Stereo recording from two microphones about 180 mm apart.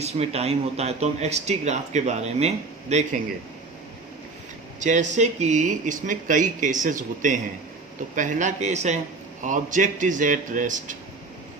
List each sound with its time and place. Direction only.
0.0 s speech: 35° right (ahead or behind)
4.8 s speech: 45° right (ahead or behind)